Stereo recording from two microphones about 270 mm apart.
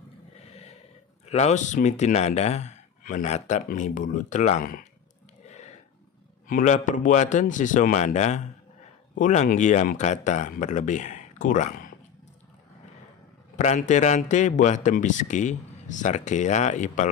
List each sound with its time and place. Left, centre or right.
0.5 s a sound: left
1.3 s a man's voice: left
6.4 s a man's voice: left
13.6 s a man's voice: left